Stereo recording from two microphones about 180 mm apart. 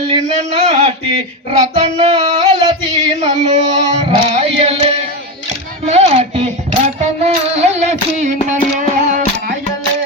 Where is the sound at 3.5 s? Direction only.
35° right (ahead or behind).